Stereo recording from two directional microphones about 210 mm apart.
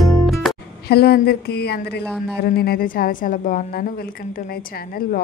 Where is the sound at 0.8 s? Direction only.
50° left (ahead or behind).